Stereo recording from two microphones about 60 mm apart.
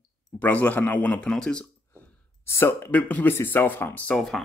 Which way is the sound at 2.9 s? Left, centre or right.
Left.